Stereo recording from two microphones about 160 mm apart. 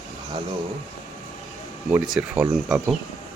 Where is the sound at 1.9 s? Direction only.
5° right (ahead or behind).